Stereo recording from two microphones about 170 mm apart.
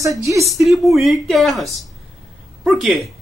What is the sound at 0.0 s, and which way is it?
Speech, 20° right (ahead or behind).